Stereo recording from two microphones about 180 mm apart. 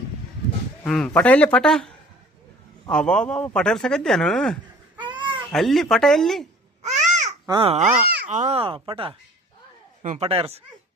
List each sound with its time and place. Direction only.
0.9 s speech: 5° left (ahead or behind)
2.9 s speech: 5° left (ahead or behind)
4.9 s a sound: 25° right (ahead or behind)
5.5 s speech: centre (ahead or behind)
6.8 s babbling: 40° right (ahead or behind)
7.3 s babbling: 20° right (ahead or behind)
7.6 s speech: 35° right (ahead or behind)